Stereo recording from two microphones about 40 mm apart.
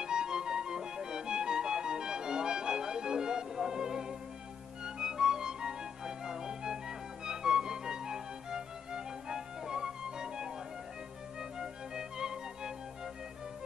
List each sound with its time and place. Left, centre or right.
0.0 s music: centre
11.5 s music: centre